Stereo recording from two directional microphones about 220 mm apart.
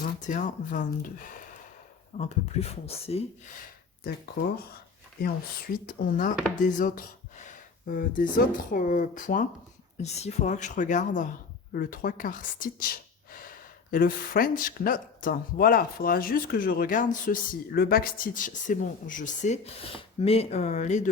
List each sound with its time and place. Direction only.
0.0 s speech: 35° left (ahead or behind)
5.7 s speech: 40° left (ahead or behind)